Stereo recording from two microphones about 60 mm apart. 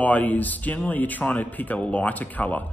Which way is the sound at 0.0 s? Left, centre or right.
Left.